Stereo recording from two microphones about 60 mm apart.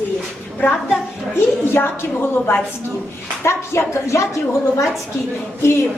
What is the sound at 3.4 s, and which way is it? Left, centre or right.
Speech, left.